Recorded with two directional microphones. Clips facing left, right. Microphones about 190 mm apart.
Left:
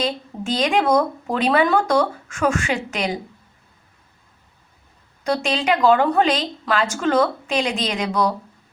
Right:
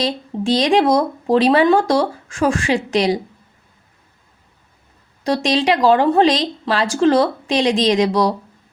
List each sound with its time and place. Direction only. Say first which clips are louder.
0.0 s speech: right 4 dB; 35° right (ahead or behind)
5.2 s speech: right 4 dB; 35° right (ahead or behind)